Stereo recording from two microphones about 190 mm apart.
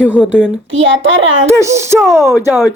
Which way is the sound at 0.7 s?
90° right.